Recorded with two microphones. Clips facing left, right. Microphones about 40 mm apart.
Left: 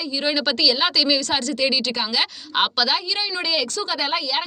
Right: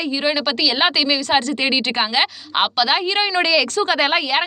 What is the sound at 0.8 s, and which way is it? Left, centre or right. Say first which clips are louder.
A woman's voice: right 2 dB; right.